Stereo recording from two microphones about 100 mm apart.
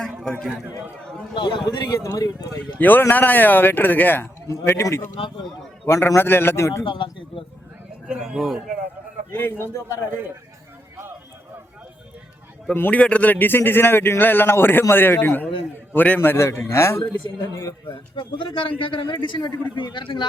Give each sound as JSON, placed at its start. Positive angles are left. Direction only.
{"t": 0.3, "sound": "a man's voice", "side_deg": 5}
{"t": 1.4, "sound": "speech", "side_deg": 50}
{"t": 2.7, "sound": "a man's voice", "side_deg": 20}
{"t": 4.4, "sound": "a man's voice", "side_deg": 30}
{"t": 6.8, "sound": "speech", "side_deg": 55}
{"t": 8.0, "sound": "speech", "side_deg": -10}
{"t": 9.3, "sound": "a man's voice", "side_deg": 20}
{"t": 12.7, "sound": "a man's voice", "side_deg": 20}
{"t": 17.8, "sound": "speech", "side_deg": 50}